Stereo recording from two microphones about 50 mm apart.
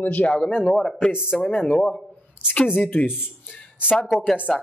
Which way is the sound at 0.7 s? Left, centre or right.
Centre.